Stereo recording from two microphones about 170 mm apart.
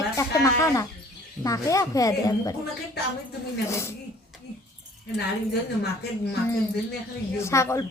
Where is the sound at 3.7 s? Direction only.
15° left (ahead or behind).